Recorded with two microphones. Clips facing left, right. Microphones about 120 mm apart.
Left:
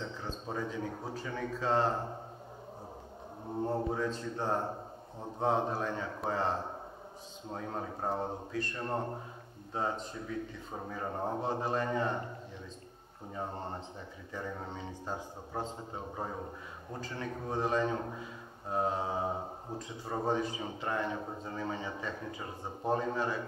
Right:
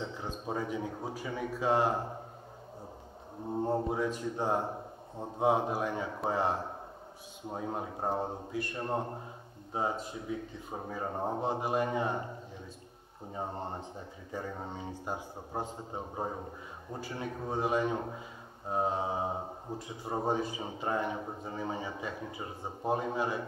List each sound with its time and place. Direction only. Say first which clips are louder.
0.0 s a man's voice: right 2 dB; 15° right (ahead or behind)
3.6 s a man's voice: right 1 dB; 15° right (ahead or behind)
13.3 s a man's voice: right 1 dB; 20° right (ahead or behind)